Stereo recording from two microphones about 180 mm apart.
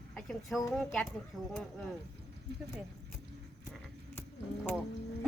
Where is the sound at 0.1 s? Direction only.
Centre (ahead or behind).